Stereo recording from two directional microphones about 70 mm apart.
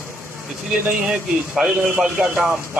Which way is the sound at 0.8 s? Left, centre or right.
Right.